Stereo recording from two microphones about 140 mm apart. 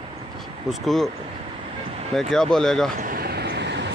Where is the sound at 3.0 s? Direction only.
90° right.